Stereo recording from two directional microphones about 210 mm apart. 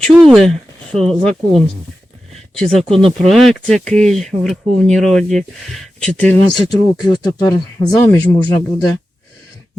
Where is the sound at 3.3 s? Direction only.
Centre (ahead or behind).